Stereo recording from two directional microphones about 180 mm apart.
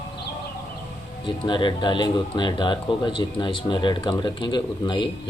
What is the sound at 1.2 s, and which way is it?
Speech, 25° left (ahead or behind).